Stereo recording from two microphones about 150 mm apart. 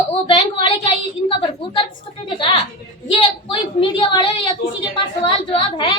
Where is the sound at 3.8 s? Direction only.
30° left (ahead or behind).